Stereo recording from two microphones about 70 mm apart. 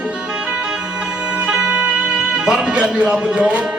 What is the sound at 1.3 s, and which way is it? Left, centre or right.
Music, centre.